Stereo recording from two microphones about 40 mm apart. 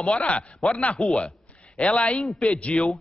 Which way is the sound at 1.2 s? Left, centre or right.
Centre.